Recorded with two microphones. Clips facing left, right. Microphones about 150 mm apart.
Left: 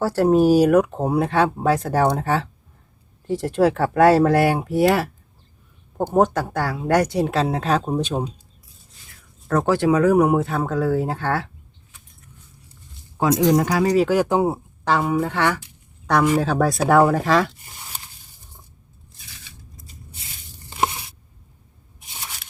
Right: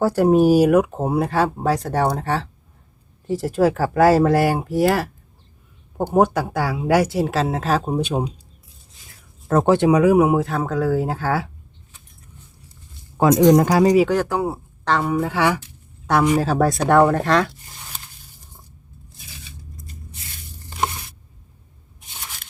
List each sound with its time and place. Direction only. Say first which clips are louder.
0.0 s speech: right 1 dB; 15° right (ahead or behind)
9.5 s speech: right 3 dB; 25° right (ahead or behind); by 11.5 s 5° right (ahead or behind)
13.1 s speech: right 4 dB; 60° right (ahead or behind)
13.5 s speech: right 4 dB; 40° right (ahead or behind)
14.3 s speech: left 3 dB; 20° left (ahead or behind)
14.8 s speech: even; 5° left (ahead or behind)
20.7 s tearing: left 2 dB; 5° left (ahead or behind)